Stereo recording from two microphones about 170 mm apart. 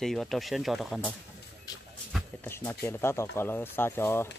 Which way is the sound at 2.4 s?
15° left (ahead or behind).